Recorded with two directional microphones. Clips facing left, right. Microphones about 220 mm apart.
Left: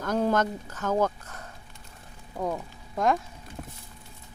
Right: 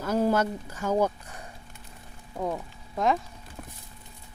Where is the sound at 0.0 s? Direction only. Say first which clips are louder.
Right 1 dB; 5° right (ahead or behind).